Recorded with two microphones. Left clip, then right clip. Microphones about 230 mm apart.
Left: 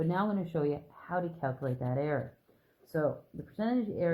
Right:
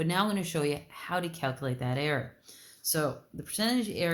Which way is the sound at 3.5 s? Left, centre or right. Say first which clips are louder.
Right 3 dB; right.